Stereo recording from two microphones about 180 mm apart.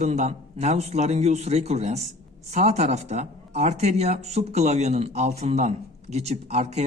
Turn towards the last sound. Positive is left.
turn(degrees=-35)  # may be behind; listen again after turning